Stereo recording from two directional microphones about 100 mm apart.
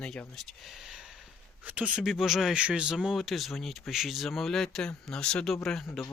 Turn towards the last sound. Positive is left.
turn(degrees=5)  # may be behind; listen again after turning